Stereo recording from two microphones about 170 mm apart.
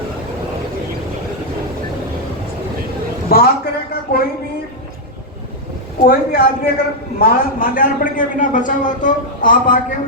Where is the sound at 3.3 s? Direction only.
65° left (ahead or behind).